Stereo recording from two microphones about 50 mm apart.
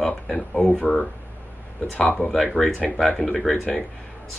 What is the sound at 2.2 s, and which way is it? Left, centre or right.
Speech, centre.